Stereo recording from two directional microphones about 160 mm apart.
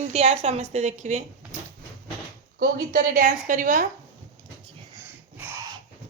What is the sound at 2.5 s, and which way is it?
A woman's voice, 60° right (ahead or behind).